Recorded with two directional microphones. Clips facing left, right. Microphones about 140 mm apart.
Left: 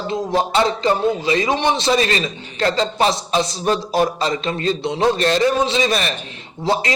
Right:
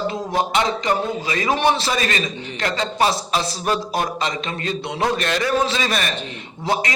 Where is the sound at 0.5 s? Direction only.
30° left (ahead or behind).